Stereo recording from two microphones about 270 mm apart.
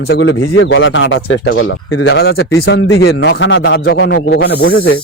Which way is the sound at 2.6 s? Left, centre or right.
Left.